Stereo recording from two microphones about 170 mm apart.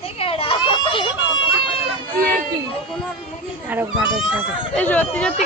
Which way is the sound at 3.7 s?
5° right (ahead or behind).